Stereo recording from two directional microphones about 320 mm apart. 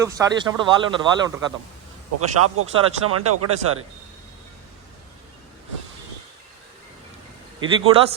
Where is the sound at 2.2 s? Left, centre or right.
Right.